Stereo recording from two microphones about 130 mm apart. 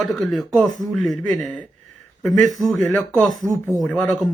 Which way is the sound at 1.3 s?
75° right (ahead or behind).